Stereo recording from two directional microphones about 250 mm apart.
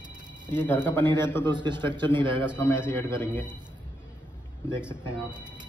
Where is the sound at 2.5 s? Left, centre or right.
Centre.